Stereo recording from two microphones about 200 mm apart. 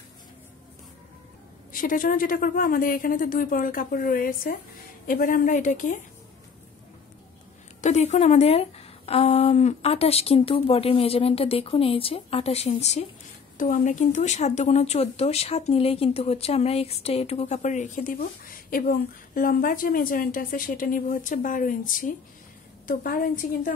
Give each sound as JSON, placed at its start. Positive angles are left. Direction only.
{"t": 1.7, "sound": "a woman's voice", "side_deg": 45}
{"t": 7.8, "sound": "a woman's voice", "side_deg": 35}